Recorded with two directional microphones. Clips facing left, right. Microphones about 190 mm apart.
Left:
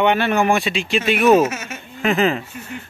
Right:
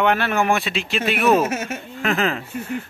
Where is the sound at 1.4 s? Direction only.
55° right (ahead or behind).